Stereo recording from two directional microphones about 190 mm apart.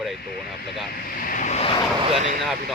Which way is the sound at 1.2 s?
45° left (ahead or behind).